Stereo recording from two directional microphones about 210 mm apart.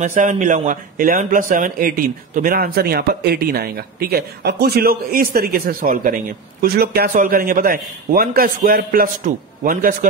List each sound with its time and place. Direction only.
0.0 s speech: 35° right (ahead or behind)